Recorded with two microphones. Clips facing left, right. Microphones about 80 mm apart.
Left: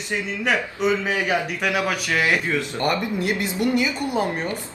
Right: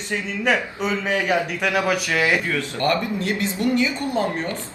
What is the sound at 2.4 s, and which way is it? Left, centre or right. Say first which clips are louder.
Speech: right 1 dB; centre.